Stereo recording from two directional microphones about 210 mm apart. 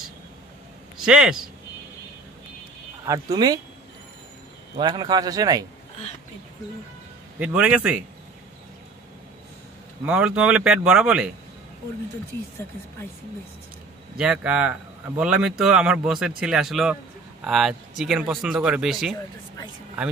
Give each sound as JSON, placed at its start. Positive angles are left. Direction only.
{"t": 1.0, "sound": "speech", "side_deg": 0}
{"t": 3.1, "sound": "speech", "side_deg": -20}
{"t": 4.7, "sound": "a man's voice", "side_deg": -20}
{"t": 7.3, "sound": "speech", "side_deg": -5}
{"t": 10.0, "sound": "speech", "side_deg": -5}
{"t": 14.1, "sound": "speech", "side_deg": -5}